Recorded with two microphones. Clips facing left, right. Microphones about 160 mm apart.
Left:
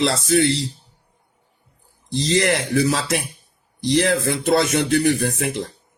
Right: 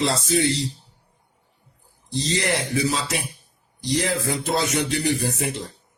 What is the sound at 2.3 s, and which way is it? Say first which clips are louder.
Speech: left 5 dB; 70° left (ahead or behind).